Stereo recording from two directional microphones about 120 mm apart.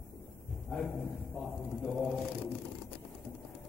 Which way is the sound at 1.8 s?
5° left (ahead or behind).